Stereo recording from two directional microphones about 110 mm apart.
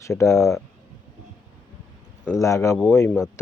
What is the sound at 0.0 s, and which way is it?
Speech, 25° left (ahead or behind).